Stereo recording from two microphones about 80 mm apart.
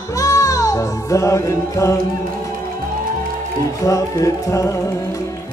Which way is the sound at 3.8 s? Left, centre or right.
Left.